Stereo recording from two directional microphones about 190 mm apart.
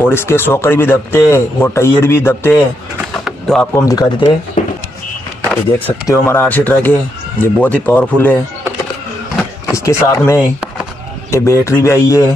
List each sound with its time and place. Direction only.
0.0 s speech: 15° left (ahead or behind)
3.3 s a sound: centre (ahead or behind)
3.7 s speech: 20° left (ahead or behind)
4.6 s a sound: 40° left (ahead or behind)
5.5 s speech: 10° left (ahead or behind)
9.8 s speech: 15° left (ahead or behind)